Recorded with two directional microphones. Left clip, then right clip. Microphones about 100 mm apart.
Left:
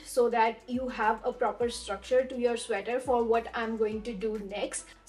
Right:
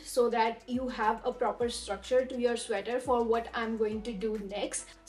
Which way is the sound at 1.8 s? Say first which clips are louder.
Left 1 dB; 15° left (ahead or behind).